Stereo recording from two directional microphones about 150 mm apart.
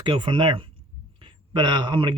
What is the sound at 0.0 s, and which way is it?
Speech, 30° right (ahead or behind).